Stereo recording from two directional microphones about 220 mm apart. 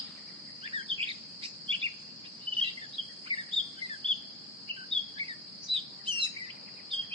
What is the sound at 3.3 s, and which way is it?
Bird vocalization, 25° right (ahead or behind).